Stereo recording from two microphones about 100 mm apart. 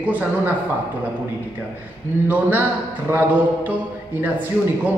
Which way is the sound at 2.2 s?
15° right (ahead or behind).